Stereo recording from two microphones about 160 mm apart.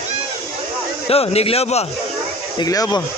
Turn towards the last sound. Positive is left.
turn(degrees=25)  # may be behind; listen again after turning